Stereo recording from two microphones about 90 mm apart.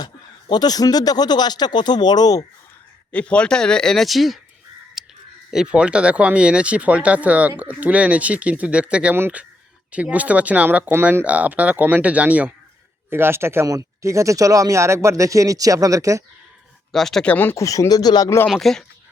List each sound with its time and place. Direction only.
0.5 s speech: 50° left (ahead or behind)
3.1 s speech: 15° left (ahead or behind)
5.0 s a sound: 5° right (ahead or behind)
5.5 s speech: 5° right (ahead or behind)
9.1 s speech: 25° right (ahead or behind)
16.9 s speech: 5° left (ahead or behind)
17.2 s speech: 20° left (ahead or behind)
17.6 s speech: 35° left (ahead or behind)
18.4 s speech: centre (ahead or behind)